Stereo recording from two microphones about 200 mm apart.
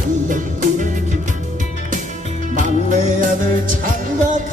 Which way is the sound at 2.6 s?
40° right (ahead or behind).